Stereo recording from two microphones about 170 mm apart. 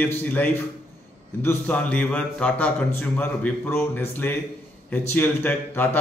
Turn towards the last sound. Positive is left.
turn(degrees=10)  # may be behind; listen again after turning